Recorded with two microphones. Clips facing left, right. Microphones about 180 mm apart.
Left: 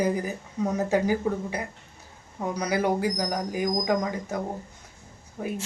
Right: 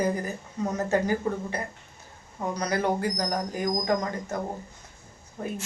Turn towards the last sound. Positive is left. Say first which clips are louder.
# left 2 dB
turn(degrees=10)  # may be behind; listen again after turning